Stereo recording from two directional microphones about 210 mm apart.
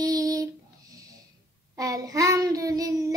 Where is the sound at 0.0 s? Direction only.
15° right (ahead or behind).